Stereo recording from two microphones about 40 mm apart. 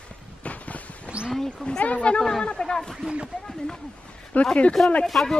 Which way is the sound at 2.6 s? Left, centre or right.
Centre.